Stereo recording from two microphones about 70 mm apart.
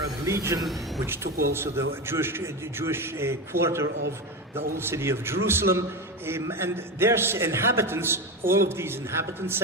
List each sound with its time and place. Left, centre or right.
0.3 s a man's voice: right